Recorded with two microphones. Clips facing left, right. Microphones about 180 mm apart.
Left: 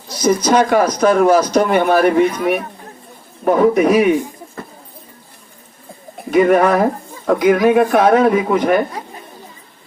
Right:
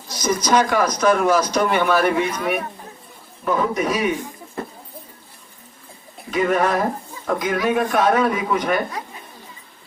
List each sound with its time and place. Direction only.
0.2 s speech: 30° left (ahead or behind)
0.4 s a man's voice: 50° left (ahead or behind)
3.4 s speech: 55° left (ahead or behind)
6.3 s speech: 55° left (ahead or behind)